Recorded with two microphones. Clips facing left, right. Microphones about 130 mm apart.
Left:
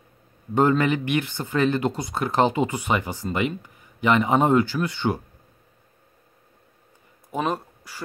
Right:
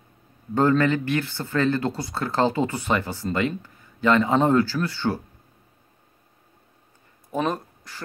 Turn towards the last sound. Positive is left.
turn(degrees=10)  # may be behind; listen again after turning